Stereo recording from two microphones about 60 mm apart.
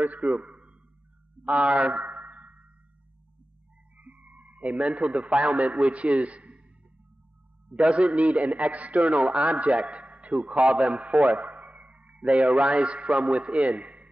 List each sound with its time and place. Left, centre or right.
0.0 s a man's voice: right
1.6 s a sound: right
3.9 s a man's voice: right
7.7 s a man's voice: centre